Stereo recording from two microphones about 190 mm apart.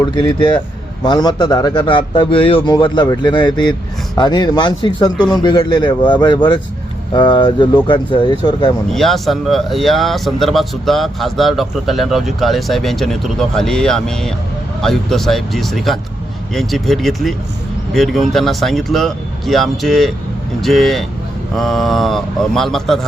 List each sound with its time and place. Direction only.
0.0 s speech: 25° left (ahead or behind)
8.9 s speech: centre (ahead or behind)